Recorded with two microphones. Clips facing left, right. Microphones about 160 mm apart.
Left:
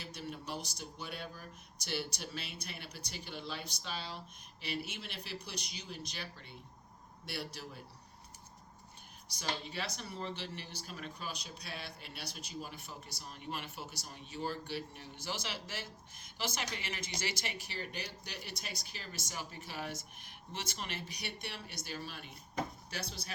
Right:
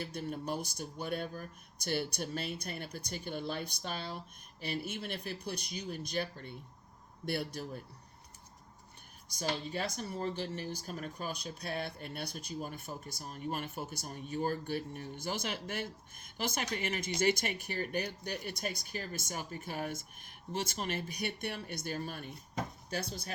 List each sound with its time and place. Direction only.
0.0 s speech: 50° right (ahead or behind)
9.3 s speech: 45° right (ahead or behind)